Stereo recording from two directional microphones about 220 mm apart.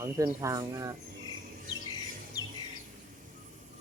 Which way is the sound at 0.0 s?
15° right (ahead or behind).